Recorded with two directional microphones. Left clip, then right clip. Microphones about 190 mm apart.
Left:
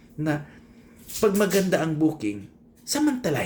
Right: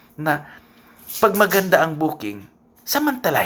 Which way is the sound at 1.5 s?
5° left (ahead or behind).